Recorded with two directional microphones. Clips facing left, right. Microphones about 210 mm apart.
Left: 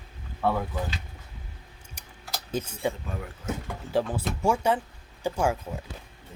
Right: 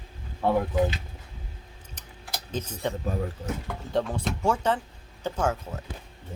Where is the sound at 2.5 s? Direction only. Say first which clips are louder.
Left 2 dB; 10° left (ahead or behind).